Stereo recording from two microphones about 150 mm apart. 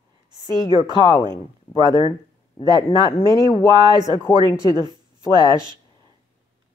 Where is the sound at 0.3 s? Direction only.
30° right (ahead or behind).